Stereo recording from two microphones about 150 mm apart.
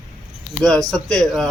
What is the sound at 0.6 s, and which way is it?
Speech, 50° left (ahead or behind).